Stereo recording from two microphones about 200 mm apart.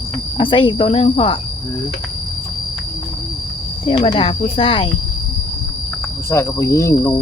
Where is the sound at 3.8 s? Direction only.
25° left (ahead or behind).